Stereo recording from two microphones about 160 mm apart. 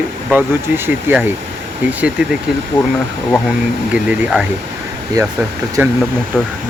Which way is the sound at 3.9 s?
10° right (ahead or behind).